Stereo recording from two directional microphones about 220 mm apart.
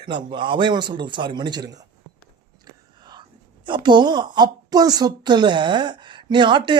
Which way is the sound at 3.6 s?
20° right (ahead or behind).